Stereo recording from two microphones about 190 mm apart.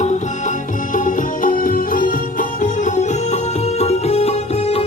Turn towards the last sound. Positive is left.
turn(degrees=30)  # may be behind; listen again after turning